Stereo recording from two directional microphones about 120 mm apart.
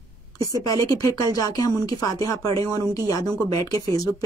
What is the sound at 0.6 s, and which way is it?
A woman's voice, 30° left (ahead or behind).